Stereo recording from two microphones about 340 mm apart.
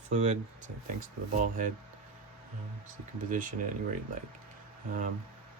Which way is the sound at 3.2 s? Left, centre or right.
Right.